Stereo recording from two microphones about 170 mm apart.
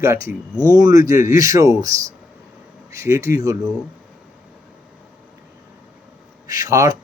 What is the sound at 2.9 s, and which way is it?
Speech, 15° right (ahead or behind).